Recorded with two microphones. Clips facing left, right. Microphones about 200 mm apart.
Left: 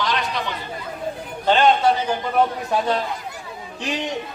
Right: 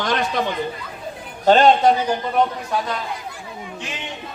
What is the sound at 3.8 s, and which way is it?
Speech, 40° left (ahead or behind).